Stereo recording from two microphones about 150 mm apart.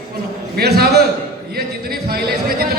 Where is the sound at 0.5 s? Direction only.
90° right.